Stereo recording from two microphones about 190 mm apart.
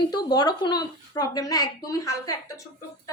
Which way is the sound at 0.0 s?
20° left (ahead or behind).